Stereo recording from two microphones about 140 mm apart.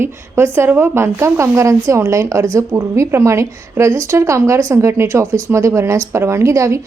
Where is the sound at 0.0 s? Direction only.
15° right (ahead or behind).